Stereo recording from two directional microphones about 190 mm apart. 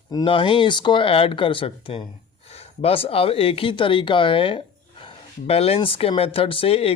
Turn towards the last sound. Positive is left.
turn(degrees=30)  # may be behind; listen again after turning